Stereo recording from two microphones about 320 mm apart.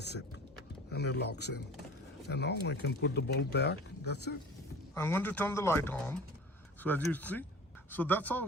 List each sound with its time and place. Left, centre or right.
0.0 s a sound: left
0.9 s speech: left
4.9 s a man's voice: centre